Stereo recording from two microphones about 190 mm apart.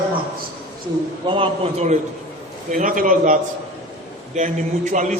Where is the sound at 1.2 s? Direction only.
30° right (ahead or behind).